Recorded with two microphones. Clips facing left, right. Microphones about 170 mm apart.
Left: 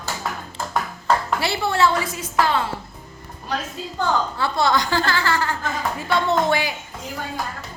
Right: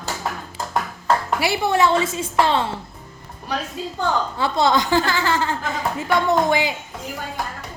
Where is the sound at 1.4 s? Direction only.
15° right (ahead or behind).